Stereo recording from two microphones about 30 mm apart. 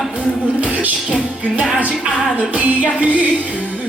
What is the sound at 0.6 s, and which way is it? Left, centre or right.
Music, right.